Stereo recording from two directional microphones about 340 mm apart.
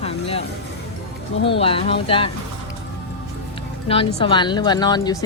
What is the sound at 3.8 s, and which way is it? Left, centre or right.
Speech, centre.